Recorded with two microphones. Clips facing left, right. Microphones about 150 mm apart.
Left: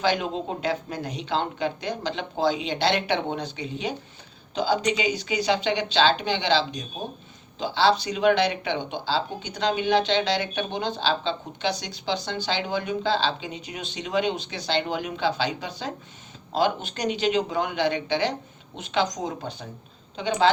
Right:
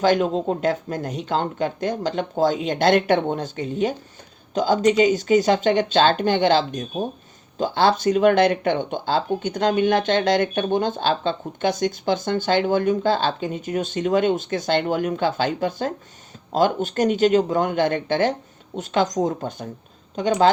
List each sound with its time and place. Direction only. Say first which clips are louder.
0.0 s speech: right 6 dB; 45° right (ahead or behind)